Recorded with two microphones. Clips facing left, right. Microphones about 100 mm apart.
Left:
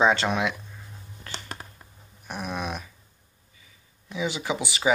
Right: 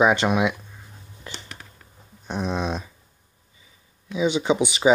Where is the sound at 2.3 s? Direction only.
20° right (ahead or behind).